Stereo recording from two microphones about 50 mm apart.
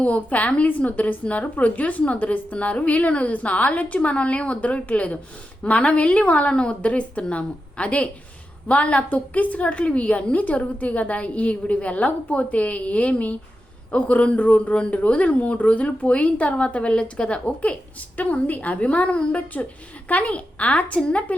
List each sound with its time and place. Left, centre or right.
0.0 s a woman's voice: left